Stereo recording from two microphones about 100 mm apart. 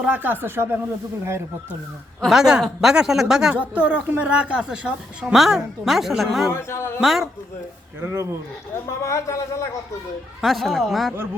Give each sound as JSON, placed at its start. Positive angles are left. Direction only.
{"t": 0.0, "sound": "speech", "side_deg": -15}
{"t": 2.2, "sound": "a woman's voice", "side_deg": -5}
{"t": 6.5, "sound": "a man's voice", "side_deg": 25}
{"t": 7.0, "sound": "a woman's voice", "side_deg": 0}
{"t": 8.0, "sound": "speech", "side_deg": -25}
{"t": 8.9, "sound": "speech", "side_deg": 30}
{"t": 10.4, "sound": "a woman's voice", "side_deg": 0}